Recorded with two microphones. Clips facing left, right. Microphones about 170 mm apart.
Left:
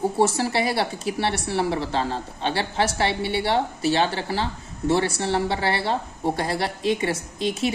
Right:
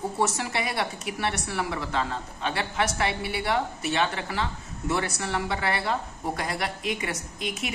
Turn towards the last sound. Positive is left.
turn(degrees=30)  # may be behind; listen again after turning